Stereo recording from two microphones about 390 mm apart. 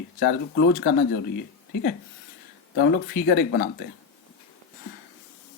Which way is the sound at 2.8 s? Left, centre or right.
Left.